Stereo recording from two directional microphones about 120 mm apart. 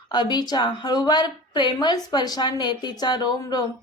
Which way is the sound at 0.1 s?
35° left (ahead or behind).